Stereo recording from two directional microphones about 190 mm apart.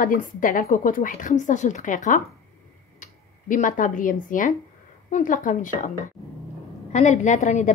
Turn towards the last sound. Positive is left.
turn(degrees=40)  # may be behind; listen again after turning